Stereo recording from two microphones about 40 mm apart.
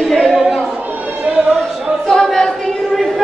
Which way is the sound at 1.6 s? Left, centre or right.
Centre.